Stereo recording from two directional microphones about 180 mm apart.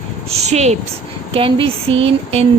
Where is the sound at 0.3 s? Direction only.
40° right (ahead or behind).